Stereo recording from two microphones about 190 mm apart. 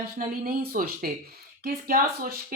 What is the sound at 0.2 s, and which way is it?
Speech, 50° right (ahead or behind).